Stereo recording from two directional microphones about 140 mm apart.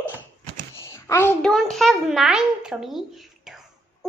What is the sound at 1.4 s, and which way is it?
Child singing, 5° left (ahead or behind).